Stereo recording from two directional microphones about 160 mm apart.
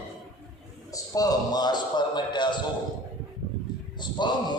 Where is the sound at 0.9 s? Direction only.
20° left (ahead or behind).